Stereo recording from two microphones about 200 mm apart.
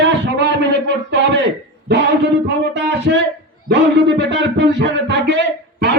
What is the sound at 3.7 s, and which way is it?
A man's voice, 60° right (ahead or behind).